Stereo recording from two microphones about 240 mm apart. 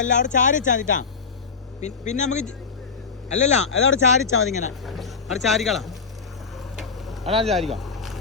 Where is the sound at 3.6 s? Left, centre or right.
Left.